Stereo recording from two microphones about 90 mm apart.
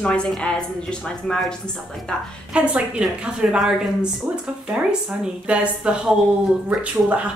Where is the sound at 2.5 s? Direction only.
15° right (ahead or behind).